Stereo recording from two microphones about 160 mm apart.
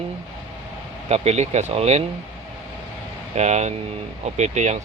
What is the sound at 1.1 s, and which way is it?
Speech, 40° right (ahead or behind).